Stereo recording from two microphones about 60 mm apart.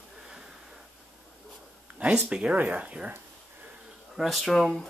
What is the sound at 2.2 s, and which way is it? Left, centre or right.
Speech, centre.